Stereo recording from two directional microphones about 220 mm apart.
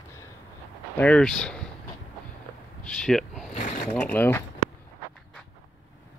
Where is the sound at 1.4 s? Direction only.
5° left (ahead or behind).